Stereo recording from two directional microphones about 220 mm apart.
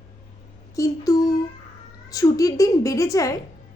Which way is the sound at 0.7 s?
15° left (ahead or behind).